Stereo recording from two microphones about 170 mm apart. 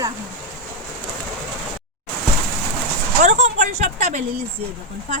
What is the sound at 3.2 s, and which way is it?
Speech, 45° right (ahead or behind).